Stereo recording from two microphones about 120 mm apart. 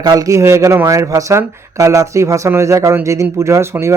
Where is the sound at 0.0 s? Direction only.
30° right (ahead or behind).